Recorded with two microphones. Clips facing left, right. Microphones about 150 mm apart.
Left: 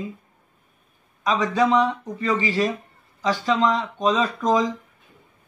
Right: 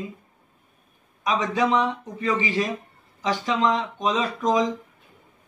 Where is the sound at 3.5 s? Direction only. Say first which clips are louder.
Left 1 dB; 15° right (ahead or behind).